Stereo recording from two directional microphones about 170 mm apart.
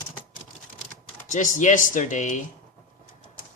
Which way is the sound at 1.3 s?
50° left (ahead or behind).